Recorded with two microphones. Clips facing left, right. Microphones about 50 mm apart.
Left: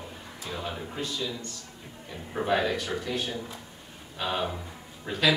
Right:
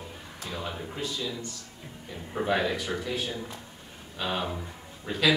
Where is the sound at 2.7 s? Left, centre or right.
Right.